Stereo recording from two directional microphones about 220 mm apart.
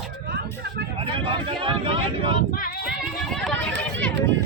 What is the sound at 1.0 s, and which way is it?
Speech, 25° right (ahead or behind).